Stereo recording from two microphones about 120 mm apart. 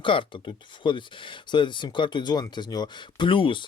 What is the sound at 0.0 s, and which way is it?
Speech, 45° left (ahead or behind).